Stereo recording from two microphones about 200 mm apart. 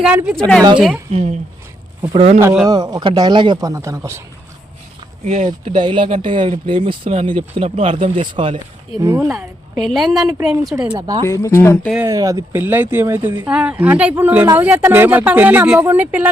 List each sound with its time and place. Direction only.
0.0 s a woman's voice: 5° right (ahead or behind)
1.1 s speech: 35° right (ahead or behind)
2.4 s a woman's voice: 5° right (ahead or behind)
2.6 s speech: 20° right (ahead or behind)
5.2 s speech: 35° right (ahead or behind)
5.5 s speech: 20° right (ahead or behind)
9.3 s a woman's voice: centre (ahead or behind); by 11.3 s 20° right (ahead or behind)
11.3 s speech: 15° left (ahead or behind)
12.0 s speech: 15° right (ahead or behind)